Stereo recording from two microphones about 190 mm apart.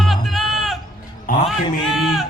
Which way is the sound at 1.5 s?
Centre (ahead or behind).